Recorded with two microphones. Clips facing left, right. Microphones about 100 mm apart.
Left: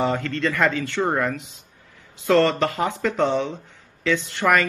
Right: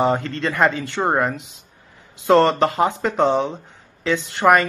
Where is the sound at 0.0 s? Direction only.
30° right (ahead or behind).